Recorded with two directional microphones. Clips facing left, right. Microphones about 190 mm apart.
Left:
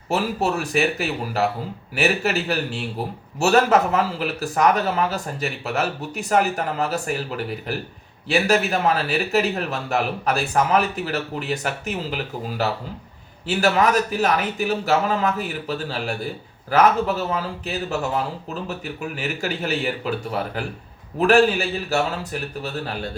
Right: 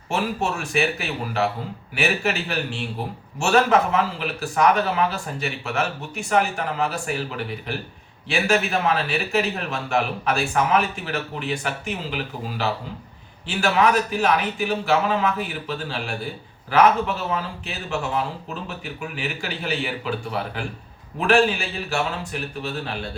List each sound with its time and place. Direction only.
0.1 s speech: 35° left (ahead or behind)
13.5 s speech: 40° left (ahead or behind)